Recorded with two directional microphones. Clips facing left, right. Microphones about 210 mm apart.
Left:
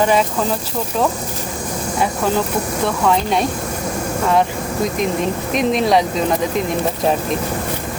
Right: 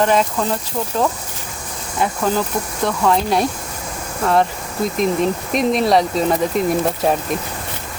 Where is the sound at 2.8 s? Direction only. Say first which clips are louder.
Right 1 dB; centre (ahead or behind).